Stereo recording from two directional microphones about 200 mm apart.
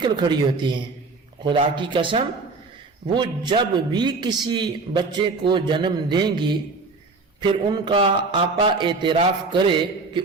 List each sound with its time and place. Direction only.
0.0 s a man's voice: 20° right (ahead or behind)
7.7 s a man's voice: 25° right (ahead or behind)